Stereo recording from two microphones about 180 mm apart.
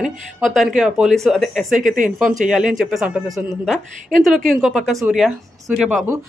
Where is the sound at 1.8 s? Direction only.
45° right (ahead or behind).